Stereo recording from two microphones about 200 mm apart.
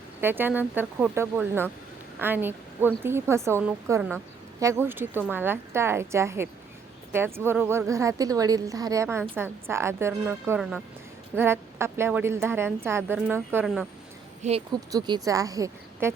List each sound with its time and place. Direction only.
0.2 s a woman's voice: 10° right (ahead or behind)
14.4 s speech: 35° right (ahead or behind)
14.9 s a woman's voice: 20° right (ahead or behind)